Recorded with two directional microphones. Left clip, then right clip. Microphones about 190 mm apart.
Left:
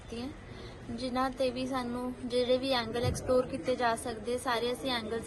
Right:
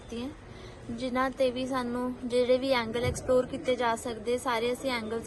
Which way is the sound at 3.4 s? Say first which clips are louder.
Right 2 dB; 35° right (ahead or behind).